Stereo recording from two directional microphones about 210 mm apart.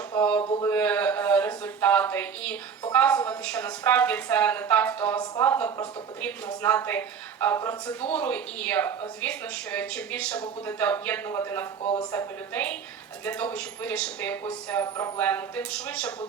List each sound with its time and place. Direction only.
0.1 s a sound: 5° left (ahead or behind)
0.4 s speech: 15° left (ahead or behind)
11.8 s speech: 25° left (ahead or behind)
12.1 s speech: 10° left (ahead or behind)